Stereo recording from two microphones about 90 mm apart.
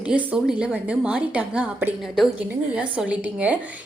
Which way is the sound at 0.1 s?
15° right (ahead or behind).